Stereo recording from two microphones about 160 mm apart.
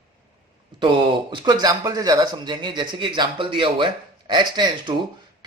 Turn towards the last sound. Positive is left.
turn(degrees=-30)  # may be behind; listen again after turning